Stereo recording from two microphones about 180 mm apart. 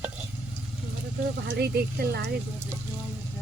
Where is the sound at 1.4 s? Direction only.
65° right (ahead or behind).